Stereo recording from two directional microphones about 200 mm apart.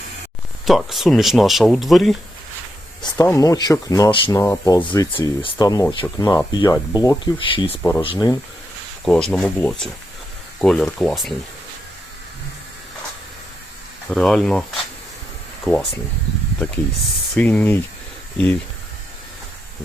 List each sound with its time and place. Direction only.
0.6 s speech: centre (ahead or behind)
3.2 s speech: 15° left (ahead or behind)
7.8 s speech: 10° left (ahead or behind)
8.0 s speech: 25° left (ahead or behind)
9.0 s speech: centre (ahead or behind)
14.1 s speech: 5° left (ahead or behind)
15.6 s speech: centre (ahead or behind)